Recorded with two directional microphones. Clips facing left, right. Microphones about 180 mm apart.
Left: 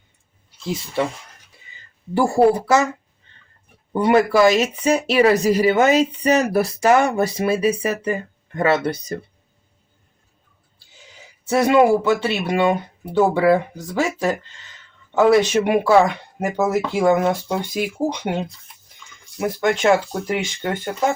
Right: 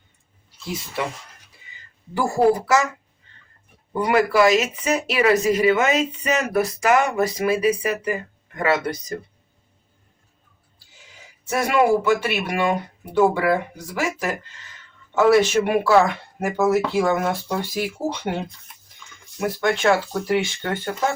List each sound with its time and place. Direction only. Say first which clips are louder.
2.1 s speech: left 3 dB; 30° left (ahead or behind)
3.9 s speech: left 3 dB; 25° left (ahead or behind)
11.4 s speech: left 4 dB; 20° left (ahead or behind)